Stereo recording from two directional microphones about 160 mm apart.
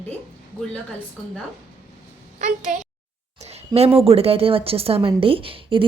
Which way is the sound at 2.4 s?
55° right (ahead or behind).